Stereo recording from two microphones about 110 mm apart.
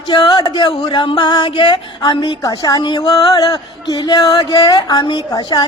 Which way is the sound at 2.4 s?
35° left (ahead or behind).